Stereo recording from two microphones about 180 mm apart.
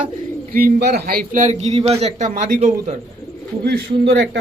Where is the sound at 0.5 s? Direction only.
60° right (ahead or behind).